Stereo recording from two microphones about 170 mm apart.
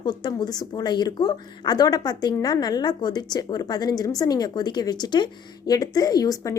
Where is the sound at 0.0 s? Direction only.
25° left (ahead or behind).